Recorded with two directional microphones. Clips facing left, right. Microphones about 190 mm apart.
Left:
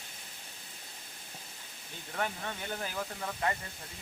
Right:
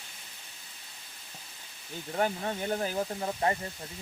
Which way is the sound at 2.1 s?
35° right (ahead or behind).